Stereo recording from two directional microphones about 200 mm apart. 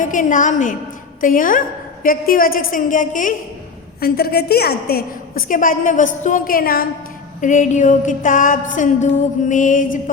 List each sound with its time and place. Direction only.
0.0 s music: 40° left (ahead or behind)
1.2 s a woman's voice: 40° left (ahead or behind)
4.0 s a woman's voice: 50° left (ahead or behind)
7.4 s music: 40° left (ahead or behind)